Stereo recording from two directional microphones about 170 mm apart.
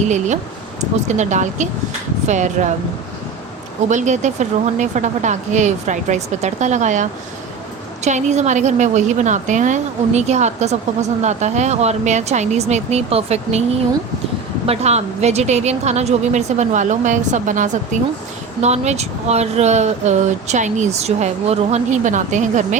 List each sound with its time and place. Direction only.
0.8 s a woman's voice: 45° right (ahead or behind)
3.8 s a woman's voice: 45° right (ahead or behind)
14.7 s speech: 40° right (ahead or behind)